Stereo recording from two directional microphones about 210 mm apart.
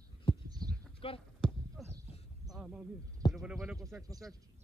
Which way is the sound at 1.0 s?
25° left (ahead or behind).